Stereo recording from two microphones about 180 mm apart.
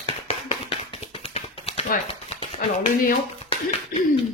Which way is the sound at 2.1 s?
30° left (ahead or behind).